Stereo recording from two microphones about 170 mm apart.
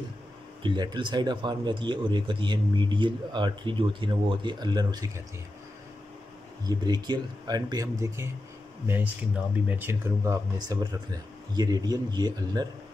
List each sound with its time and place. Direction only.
0.6 s speech: 30° right (ahead or behind)
6.6 s speech: 25° right (ahead or behind)
8.8 s speech: 10° right (ahead or behind)